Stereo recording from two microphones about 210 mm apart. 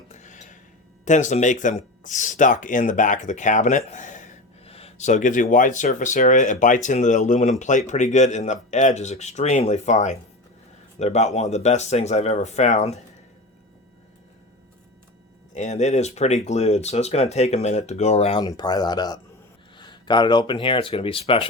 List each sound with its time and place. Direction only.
0.1 s a sound: 35° left (ahead or behind)
1.0 s speech: 35° left (ahead or behind)
15.5 s speech: 35° left (ahead or behind)